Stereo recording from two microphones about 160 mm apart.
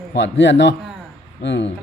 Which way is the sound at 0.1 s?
90° left.